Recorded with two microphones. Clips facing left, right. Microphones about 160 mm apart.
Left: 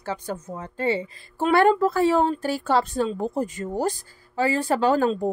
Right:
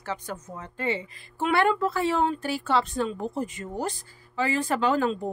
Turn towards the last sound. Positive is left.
turn(degrees=40)  # may be behind; listen again after turning